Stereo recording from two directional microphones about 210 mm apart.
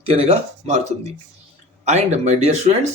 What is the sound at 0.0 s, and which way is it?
Speech, 30° right (ahead or behind).